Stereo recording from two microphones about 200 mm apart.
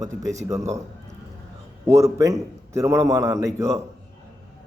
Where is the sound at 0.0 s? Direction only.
15° right (ahead or behind).